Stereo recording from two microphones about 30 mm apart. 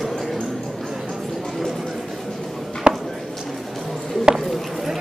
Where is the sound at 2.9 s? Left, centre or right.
Right.